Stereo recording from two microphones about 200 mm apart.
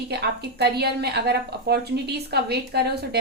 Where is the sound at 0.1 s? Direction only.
55° right (ahead or behind).